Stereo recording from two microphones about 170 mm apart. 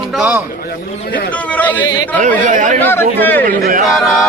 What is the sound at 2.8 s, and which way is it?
Speech, 10° left (ahead or behind).